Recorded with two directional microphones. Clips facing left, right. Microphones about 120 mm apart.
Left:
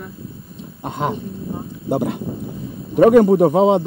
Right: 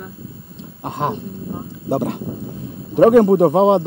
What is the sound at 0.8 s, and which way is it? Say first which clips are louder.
Speech: right 1 dB; 40° right (ahead or behind).